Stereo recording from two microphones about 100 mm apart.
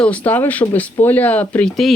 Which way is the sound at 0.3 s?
15° left (ahead or behind).